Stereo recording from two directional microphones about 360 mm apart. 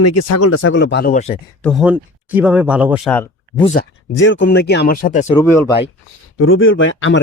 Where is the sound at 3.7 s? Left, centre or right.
Left; by 5.7 s centre.